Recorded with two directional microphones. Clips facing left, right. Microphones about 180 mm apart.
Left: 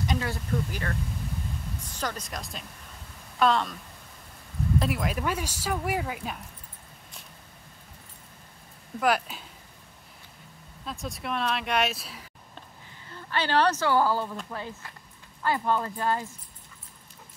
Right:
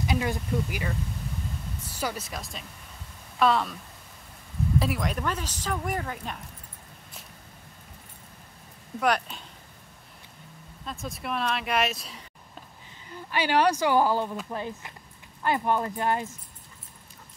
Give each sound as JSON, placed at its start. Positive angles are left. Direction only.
{"t": 0.0, "sound": "vehicle", "side_deg": -5}
{"t": 0.3, "sound": "speech", "side_deg": -10}
{"t": 4.7, "sound": "speech", "side_deg": 0}
{"t": 9.0, "sound": "speech", "side_deg": 5}
{"t": 10.9, "sound": "speech", "side_deg": 0}
{"t": 13.1, "sound": "speech", "side_deg": -15}